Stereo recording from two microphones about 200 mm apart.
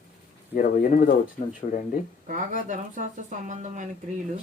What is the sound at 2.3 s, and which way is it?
Speech, 40° right (ahead or behind).